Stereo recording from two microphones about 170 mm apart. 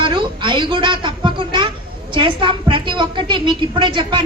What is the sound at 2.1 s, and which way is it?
A woman's voice, 30° right (ahead or behind).